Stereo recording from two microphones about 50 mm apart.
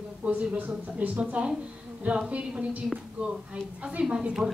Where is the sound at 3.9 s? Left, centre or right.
Right.